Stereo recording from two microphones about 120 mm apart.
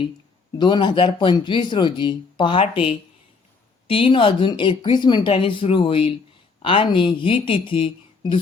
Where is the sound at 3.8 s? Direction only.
50° left (ahead or behind).